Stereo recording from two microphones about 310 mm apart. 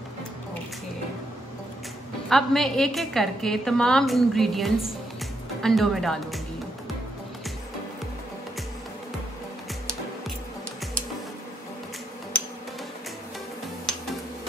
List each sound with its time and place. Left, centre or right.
2.2 s a woman's voice: centre